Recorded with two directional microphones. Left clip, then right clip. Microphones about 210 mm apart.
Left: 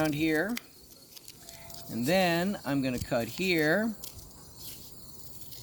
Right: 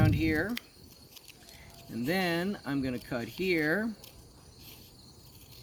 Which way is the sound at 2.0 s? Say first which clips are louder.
Left 4 dB; 25° left (ahead or behind).